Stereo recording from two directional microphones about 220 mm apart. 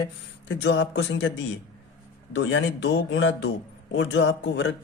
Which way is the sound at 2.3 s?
55° left (ahead or behind).